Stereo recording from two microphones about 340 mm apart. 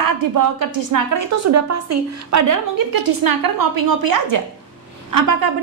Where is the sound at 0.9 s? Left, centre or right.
Right.